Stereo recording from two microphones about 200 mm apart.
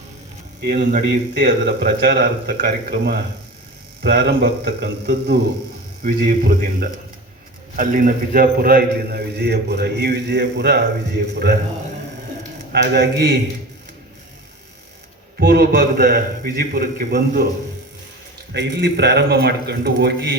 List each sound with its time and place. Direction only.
0.7 s a man's voice: 45° right (ahead or behind)
12.7 s a man's voice: 55° right (ahead or behind)
15.4 s a man's voice: 50° right (ahead or behind)
18.5 s a man's voice: 60° right (ahead or behind)